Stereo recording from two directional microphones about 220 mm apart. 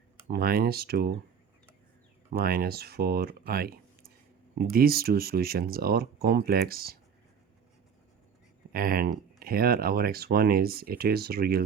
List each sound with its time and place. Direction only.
0.3 s speech: 45° right (ahead or behind)
2.4 s speech: 45° right (ahead or behind)
8.7 s speech: 40° right (ahead or behind)